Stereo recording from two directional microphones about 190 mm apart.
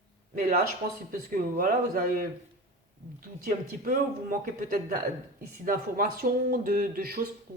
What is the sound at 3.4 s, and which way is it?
Speech, 50° right (ahead or behind).